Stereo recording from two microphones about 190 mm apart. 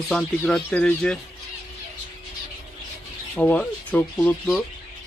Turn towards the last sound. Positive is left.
turn(degrees=5)  # may be behind; listen again after turning